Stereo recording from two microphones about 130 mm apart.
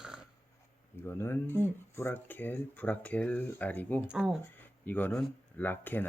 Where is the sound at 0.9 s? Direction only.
20° left (ahead or behind).